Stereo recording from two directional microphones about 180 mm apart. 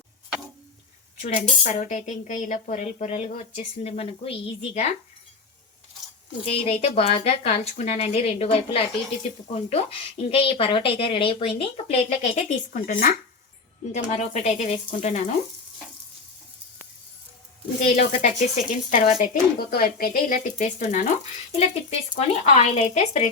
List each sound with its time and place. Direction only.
1.2 s speech: 45° left (ahead or behind)
6.4 s speech: 35° left (ahead or behind)
13.9 s speech: 40° left (ahead or behind)
17.8 s speech: 40° left (ahead or behind)